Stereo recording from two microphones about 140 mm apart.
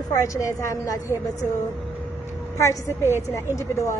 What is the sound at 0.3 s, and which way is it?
Speech, 20° left (ahead or behind).